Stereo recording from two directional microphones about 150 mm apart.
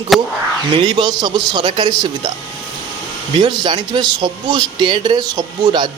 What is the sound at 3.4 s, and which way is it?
Speech, 30° right (ahead or behind).